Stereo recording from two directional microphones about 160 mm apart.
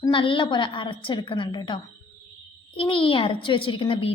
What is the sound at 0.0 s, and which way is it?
A woman's voice, 30° left (ahead or behind).